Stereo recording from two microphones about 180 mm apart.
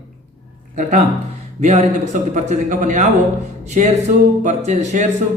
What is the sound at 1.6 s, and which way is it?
Speech, 40° right (ahead or behind).